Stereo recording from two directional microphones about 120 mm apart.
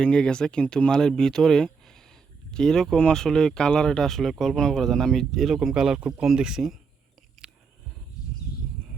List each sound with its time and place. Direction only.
0.0 s speech: 5° left (ahead or behind)
7.4 s biting: centre (ahead or behind)